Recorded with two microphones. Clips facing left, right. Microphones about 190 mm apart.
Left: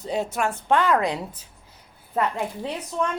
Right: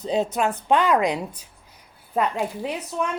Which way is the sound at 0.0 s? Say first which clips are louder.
Right 3 dB; 20° right (ahead or behind).